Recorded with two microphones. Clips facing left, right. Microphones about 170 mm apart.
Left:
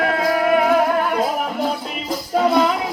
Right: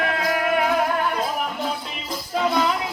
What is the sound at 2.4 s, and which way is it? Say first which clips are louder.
Music: left 5 dB; 40° left (ahead or behind).